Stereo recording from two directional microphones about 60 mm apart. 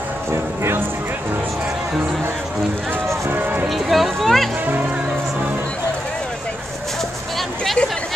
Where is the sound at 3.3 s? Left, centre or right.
Right.